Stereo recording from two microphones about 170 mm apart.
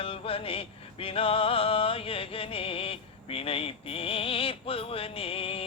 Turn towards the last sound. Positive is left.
turn(degrees=35)  # may be behind; listen again after turning